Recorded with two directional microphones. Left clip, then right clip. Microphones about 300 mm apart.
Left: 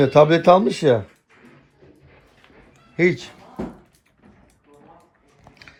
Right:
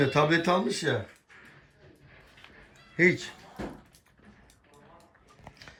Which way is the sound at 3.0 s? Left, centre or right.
Centre.